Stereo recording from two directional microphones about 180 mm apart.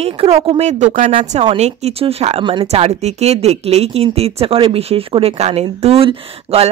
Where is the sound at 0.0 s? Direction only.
35° right (ahead or behind).